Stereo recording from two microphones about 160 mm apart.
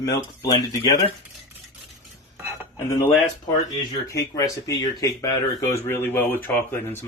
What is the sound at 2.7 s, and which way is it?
Speech, 20° left (ahead or behind).